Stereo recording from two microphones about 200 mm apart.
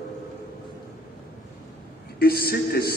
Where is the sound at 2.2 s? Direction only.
50° left (ahead or behind).